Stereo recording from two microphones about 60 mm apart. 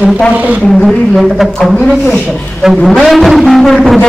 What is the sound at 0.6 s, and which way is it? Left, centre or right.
Speech, centre.